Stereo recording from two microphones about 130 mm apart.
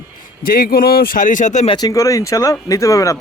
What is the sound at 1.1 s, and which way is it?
Speech, 85° left.